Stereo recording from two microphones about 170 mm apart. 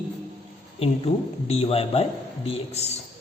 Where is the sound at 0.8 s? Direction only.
35° left (ahead or behind).